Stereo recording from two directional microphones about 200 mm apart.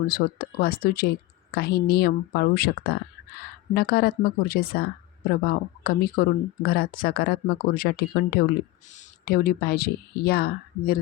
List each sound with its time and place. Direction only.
0.1 s speech: 50° left (ahead or behind)